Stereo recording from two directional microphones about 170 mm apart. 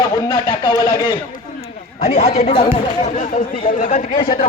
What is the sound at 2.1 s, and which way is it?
Speech, 40° left (ahead or behind).